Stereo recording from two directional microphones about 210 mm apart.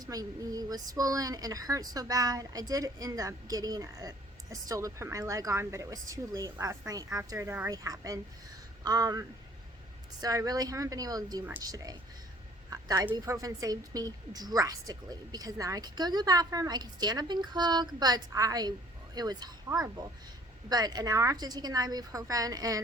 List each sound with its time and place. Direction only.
0.0 s a woman's voice: 15° right (ahead or behind)